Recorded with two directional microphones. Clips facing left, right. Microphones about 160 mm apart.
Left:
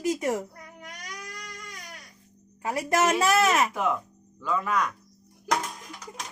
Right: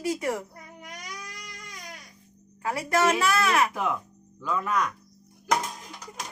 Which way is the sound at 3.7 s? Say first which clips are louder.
Left 2 dB; centre (ahead or behind).